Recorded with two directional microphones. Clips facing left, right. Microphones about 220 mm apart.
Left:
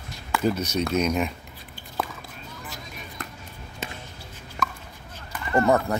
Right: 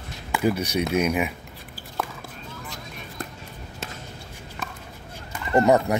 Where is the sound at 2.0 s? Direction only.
Centre (ahead or behind).